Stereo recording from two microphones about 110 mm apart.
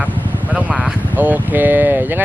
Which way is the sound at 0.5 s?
10° right (ahead or behind).